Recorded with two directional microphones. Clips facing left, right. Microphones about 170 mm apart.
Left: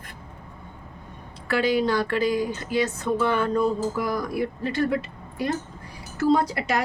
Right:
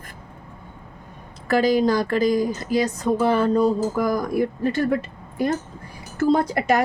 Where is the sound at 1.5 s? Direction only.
40° right (ahead or behind).